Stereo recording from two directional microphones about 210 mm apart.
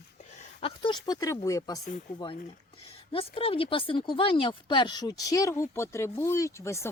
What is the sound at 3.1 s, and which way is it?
Speech, 25° left (ahead or behind).